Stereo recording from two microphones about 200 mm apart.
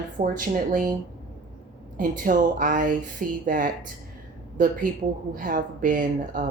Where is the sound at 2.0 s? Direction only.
45° right (ahead or behind).